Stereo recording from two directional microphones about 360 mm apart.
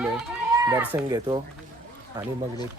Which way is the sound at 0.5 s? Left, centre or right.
Centre.